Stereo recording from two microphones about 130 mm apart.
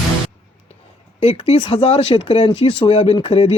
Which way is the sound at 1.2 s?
50° left (ahead or behind).